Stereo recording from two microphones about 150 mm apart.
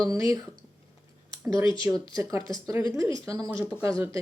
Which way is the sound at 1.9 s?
15° right (ahead or behind).